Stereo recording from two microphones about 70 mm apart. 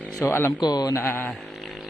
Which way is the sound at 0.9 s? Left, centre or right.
Left.